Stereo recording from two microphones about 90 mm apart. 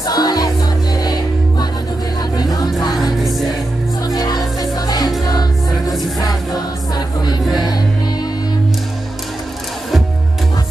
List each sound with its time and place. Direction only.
0.0 s music: 45° left (ahead or behind)
2.3 s music: 45° left (ahead or behind)
3.0 s music: centre (ahead or behind)
4.0 s music: 45° left (ahead or behind)